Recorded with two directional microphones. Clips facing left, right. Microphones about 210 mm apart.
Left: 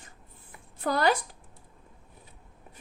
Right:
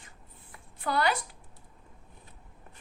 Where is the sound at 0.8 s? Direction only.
45° left (ahead or behind).